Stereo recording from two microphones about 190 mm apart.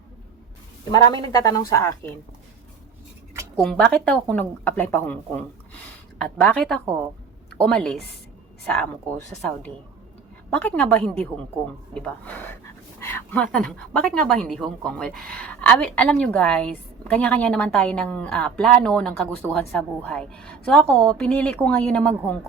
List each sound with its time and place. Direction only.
0.9 s speech: 20° left (ahead or behind)
3.5 s speech: 5° left (ahead or behind)
6.2 s a woman's voice: 5° left (ahead or behind)
10.5 s a woman's voice: 5° left (ahead or behind)